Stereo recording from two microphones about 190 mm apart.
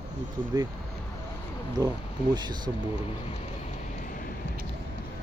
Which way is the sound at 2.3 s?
25° right (ahead or behind).